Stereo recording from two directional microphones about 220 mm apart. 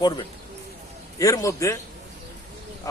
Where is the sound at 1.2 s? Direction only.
15° left (ahead or behind).